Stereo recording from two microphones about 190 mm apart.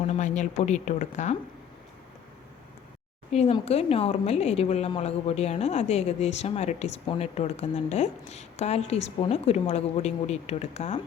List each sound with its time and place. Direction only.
0.0 s a woman's voice: 40° left (ahead or behind)
3.3 s a woman's voice: 35° left (ahead or behind)